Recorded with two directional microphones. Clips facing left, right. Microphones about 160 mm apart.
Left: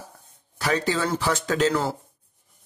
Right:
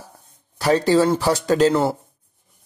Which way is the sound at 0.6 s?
35° right (ahead or behind).